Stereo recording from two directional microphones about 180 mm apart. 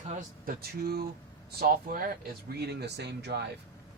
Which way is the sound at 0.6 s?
60° right (ahead or behind).